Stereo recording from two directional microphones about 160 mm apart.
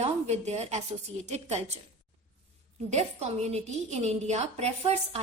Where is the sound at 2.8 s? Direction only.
45° right (ahead or behind).